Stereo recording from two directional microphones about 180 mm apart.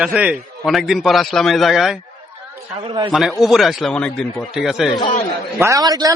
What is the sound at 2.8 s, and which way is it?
Speech, 30° right (ahead or behind).